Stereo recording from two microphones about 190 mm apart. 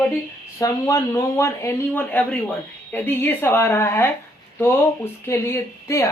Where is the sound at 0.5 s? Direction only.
15° left (ahead or behind).